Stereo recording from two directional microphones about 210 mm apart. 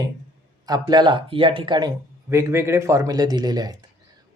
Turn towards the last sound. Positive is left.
turn(degrees=-20)  # may be behind; listen again after turning